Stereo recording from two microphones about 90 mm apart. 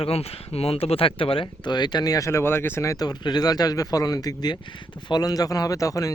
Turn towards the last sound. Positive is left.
turn(degrees=40)  # may be behind; listen again after turning